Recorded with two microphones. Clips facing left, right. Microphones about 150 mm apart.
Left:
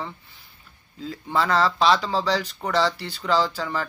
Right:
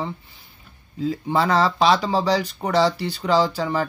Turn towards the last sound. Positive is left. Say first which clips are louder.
# right 4 dB
turn(degrees=-15)  # may be behind; listen again after turning